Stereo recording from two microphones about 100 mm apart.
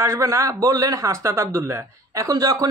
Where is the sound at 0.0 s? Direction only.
30° right (ahead or behind).